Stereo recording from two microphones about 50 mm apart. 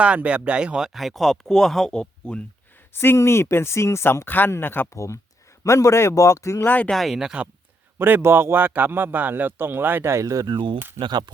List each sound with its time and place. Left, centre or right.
0.0 s speech: right
0.9 s speech: centre; by 2.5 s left
2.9 s speech: left
4.9 s speech: left
6.9 s speech: centre
7.9 s a man's voice: right
8.2 s speech: right
10.0 s speech: right